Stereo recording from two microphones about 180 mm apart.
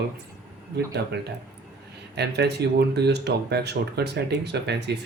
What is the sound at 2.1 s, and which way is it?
Speech, 65° right (ahead or behind).